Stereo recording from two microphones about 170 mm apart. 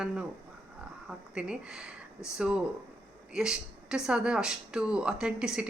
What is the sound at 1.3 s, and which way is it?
Speech, 5° right (ahead or behind).